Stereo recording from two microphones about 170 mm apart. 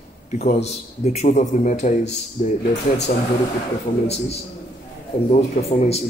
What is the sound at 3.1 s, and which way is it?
Speech, 60° left (ahead or behind).